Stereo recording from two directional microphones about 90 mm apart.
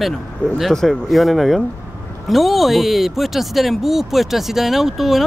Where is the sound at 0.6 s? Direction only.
Centre (ahead or behind).